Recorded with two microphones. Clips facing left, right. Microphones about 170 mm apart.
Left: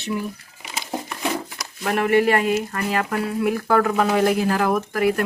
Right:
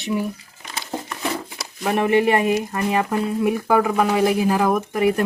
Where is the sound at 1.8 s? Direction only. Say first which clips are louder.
Right 1 dB; 20° right (ahead or behind).